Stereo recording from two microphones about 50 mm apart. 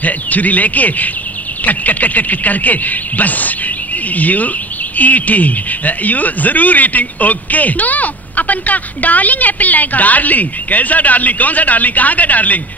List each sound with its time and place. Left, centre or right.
0.0 s speech: left